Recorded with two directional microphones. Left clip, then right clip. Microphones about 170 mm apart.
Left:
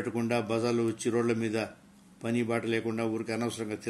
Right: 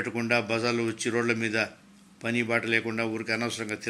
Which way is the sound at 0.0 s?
10° left (ahead or behind).